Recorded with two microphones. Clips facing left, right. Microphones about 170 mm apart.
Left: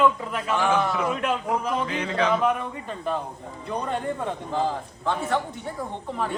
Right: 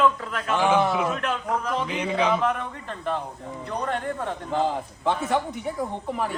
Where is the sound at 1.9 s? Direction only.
10° right (ahead or behind).